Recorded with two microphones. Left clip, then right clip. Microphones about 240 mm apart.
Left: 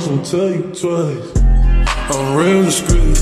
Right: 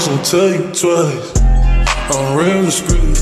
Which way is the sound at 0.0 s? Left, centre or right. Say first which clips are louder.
Right 4 dB; right.